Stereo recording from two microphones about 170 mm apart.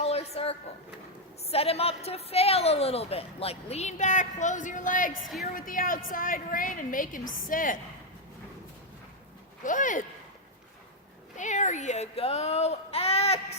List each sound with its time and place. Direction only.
0.0 s a sound: 35° left (ahead or behind)
1.5 s a woman's voice: 35° left (ahead or behind)
5.2 s a woman's voice: centre (ahead or behind)
5.5 s a woman's voice: 55° left (ahead or behind)
9.6 s a woman's voice: 50° left (ahead or behind)
11.3 s speech: 45° left (ahead or behind)